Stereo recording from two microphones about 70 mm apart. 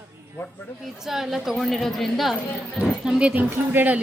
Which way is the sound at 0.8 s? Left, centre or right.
Centre.